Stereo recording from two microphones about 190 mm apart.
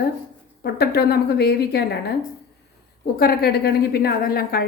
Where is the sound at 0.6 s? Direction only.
55° left (ahead or behind).